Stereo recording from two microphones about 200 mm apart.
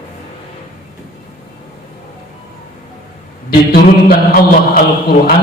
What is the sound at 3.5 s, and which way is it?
Mantra, 50° left (ahead or behind).